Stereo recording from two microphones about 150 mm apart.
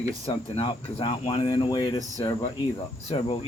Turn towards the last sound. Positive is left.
turn(degrees=35)  # may be behind; listen again after turning